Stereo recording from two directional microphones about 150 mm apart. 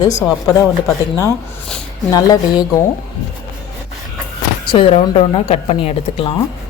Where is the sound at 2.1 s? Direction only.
25° left (ahead or behind).